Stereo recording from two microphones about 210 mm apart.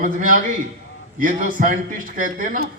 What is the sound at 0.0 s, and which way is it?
Speech, 40° right (ahead or behind).